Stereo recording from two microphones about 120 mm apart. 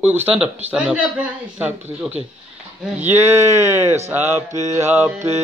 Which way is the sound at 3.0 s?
20° right (ahead or behind).